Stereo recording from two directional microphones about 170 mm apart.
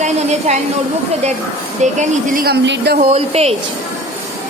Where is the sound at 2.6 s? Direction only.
90° right.